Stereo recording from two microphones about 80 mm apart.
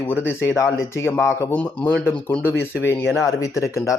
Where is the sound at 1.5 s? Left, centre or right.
Centre.